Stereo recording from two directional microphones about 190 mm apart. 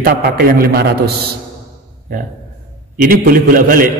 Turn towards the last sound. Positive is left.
turn(degrees=-45)  # may be behind; listen again after turning